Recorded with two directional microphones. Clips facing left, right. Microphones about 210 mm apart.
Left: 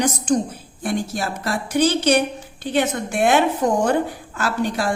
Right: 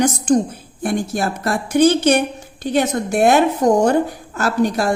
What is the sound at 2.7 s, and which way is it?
A woman's voice, 40° right (ahead or behind).